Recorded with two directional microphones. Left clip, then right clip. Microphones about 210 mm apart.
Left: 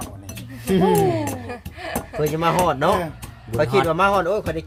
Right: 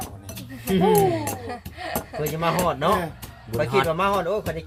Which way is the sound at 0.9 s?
5° left (ahead or behind).